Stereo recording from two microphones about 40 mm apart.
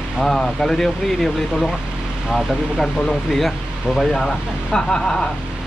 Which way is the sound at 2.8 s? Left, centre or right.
Centre.